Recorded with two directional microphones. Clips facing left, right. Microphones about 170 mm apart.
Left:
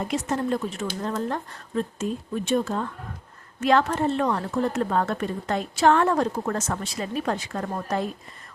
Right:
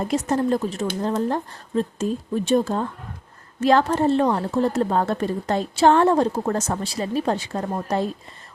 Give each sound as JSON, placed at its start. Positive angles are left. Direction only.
{"t": 0.1, "sound": "speech", "side_deg": -35}